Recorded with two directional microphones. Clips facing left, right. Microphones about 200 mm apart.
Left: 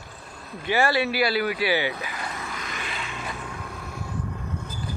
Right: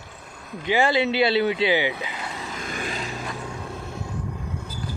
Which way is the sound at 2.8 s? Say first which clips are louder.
Right 4 dB; 40° right (ahead or behind).